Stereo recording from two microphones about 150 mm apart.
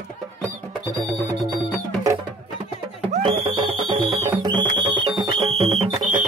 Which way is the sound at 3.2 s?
35° right (ahead or behind).